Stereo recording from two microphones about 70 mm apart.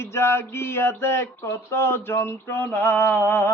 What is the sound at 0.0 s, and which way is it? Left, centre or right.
A man's voice, left.